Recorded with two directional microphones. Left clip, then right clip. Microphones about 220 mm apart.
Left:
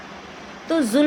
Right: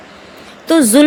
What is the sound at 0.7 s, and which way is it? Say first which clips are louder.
Speech: right 9 dB; 40° right (ahead or behind).